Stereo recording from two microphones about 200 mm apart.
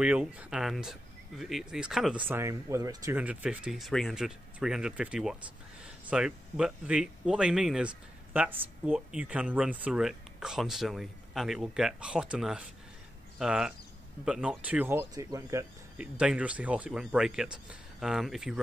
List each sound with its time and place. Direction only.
0.0 s speech: 5° right (ahead or behind)
16.0 s speech: 5° right (ahead or behind)